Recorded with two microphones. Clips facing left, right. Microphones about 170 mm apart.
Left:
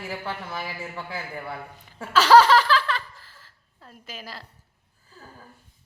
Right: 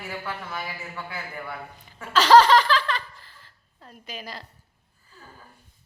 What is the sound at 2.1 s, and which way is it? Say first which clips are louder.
Laughter: even; 10° left (ahead or behind).